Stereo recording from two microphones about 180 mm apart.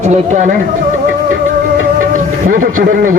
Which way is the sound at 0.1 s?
40° right (ahead or behind).